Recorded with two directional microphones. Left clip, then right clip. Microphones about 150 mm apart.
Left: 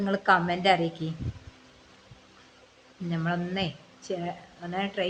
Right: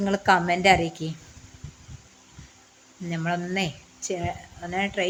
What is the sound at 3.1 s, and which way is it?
Speech, 25° right (ahead or behind).